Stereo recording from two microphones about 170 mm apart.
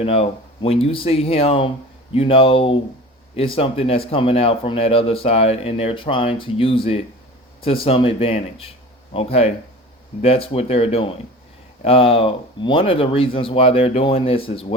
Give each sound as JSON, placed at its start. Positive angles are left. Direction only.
{"t": 0.0, "sound": "speech", "side_deg": 35}